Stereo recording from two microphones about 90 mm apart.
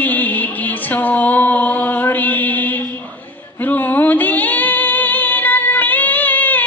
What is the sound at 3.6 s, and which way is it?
Female singing, 20° left (ahead or behind).